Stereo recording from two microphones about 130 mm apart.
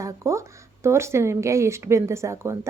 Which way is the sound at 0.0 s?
20° right (ahead or behind).